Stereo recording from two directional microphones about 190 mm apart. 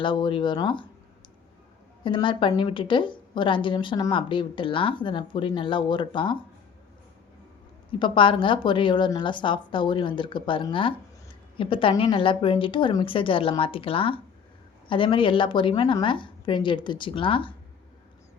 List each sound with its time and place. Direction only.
0.0 s a woman's voice: 25° left (ahead or behind)
2.0 s a woman's voice: 25° left (ahead or behind)
7.9 s a woman's voice: 25° left (ahead or behind)